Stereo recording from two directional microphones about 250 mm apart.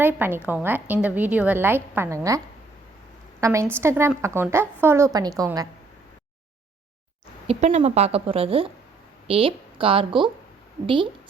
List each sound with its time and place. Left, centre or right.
0.0 s a woman's voice: centre
3.4 s a woman's voice: centre
7.4 s a woman's voice: right